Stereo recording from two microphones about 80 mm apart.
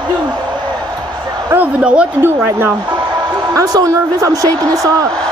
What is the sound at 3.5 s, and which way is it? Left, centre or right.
A woman's voice, right.